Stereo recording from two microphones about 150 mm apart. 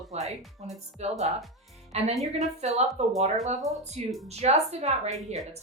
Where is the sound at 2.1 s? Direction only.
Centre (ahead or behind).